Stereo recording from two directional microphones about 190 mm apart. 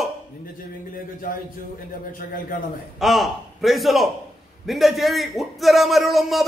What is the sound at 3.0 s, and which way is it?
A man's voice, centre (ahead or behind).